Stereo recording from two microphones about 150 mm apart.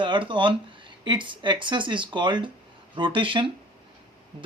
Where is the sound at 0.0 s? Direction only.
35° right (ahead or behind).